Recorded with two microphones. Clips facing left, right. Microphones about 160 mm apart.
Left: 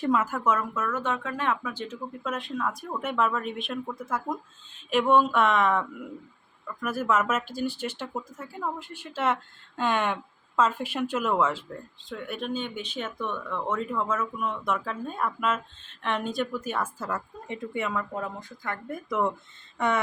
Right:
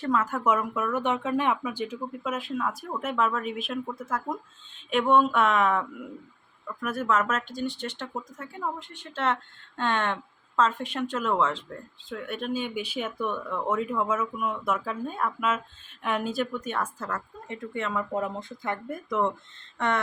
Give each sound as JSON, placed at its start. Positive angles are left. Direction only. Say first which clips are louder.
{"t": 0.0, "sound": "speech", "louder": "left 1 dB", "side_deg": 10}
{"t": 0.4, "sound": "speech", "louder": "right 1 dB", "side_deg": -15}
{"t": 18.1, "sound": "speech", "louder": "right 4 dB", "side_deg": -20}
{"t": 18.9, "sound": "speech", "louder": "even", "side_deg": 0}